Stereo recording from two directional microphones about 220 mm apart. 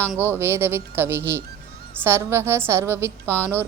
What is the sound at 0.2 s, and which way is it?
A woman's voice, 10° right (ahead or behind).